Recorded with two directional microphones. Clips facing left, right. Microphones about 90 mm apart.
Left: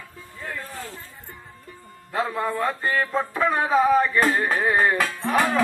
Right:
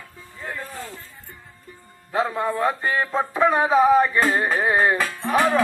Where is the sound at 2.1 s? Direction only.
15° right (ahead or behind).